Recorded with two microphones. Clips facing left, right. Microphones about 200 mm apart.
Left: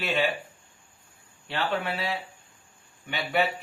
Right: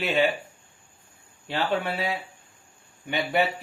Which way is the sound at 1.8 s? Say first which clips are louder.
Right 2 dB; 20° right (ahead or behind).